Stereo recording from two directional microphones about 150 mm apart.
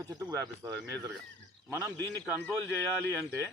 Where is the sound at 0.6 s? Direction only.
25° right (ahead or behind).